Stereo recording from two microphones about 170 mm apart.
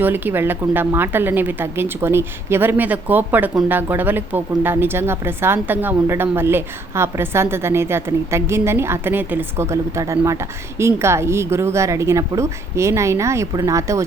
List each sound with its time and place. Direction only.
0.0 s a woman's voice: 10° right (ahead or behind)